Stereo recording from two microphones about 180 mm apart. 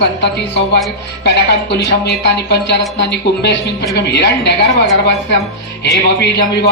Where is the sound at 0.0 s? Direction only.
70° left (ahead or behind).